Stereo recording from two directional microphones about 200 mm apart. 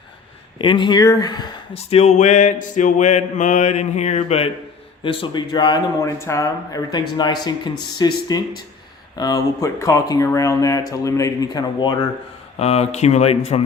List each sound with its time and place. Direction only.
0.6 s speech: 25° left (ahead or behind)
12.5 s speech: 30° left (ahead or behind)